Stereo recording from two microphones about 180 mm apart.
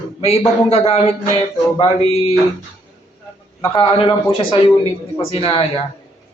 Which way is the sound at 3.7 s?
30° left (ahead or behind).